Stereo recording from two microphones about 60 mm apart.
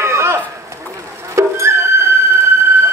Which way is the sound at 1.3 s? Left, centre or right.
Right.